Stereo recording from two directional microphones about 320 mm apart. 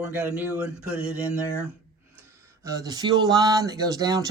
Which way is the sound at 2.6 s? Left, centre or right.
Centre.